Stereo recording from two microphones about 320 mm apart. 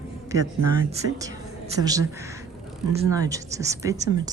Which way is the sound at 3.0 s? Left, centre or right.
Centre.